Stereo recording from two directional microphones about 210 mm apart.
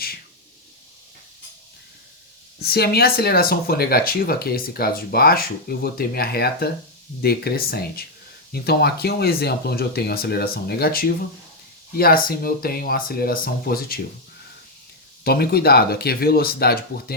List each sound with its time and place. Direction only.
2.6 s speech: 50° left (ahead or behind)
15.2 s speech: 45° left (ahead or behind)